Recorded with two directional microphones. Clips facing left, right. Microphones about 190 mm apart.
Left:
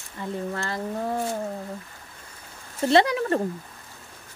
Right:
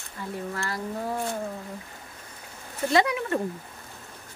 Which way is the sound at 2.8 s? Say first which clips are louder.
Left 4 dB; 35° left (ahead or behind).